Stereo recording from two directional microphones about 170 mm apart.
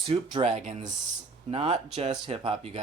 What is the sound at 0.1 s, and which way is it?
Speech, 30° right (ahead or behind).